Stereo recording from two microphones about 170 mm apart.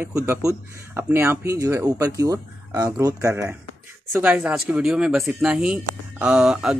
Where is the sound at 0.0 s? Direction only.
15° right (ahead or behind).